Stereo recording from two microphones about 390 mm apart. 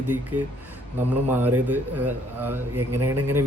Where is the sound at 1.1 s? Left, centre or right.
Centre.